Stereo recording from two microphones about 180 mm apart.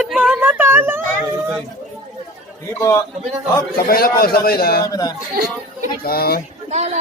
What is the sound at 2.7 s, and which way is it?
Speech, 15° left (ahead or behind).